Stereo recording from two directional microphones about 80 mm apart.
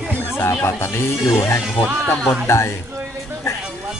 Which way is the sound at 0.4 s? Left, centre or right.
Left.